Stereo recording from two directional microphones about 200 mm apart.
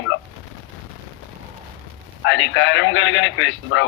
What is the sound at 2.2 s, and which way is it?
A man's voice, 65° left (ahead or behind).